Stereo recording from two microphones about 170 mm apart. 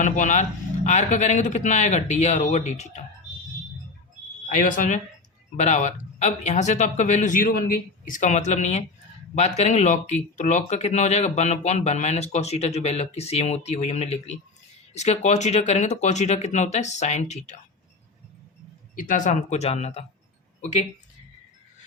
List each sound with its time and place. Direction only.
0.0 s speech: 45° left (ahead or behind)
4.4 s speech: 50° left (ahead or behind)
18.9 s speech: 50° left (ahead or behind)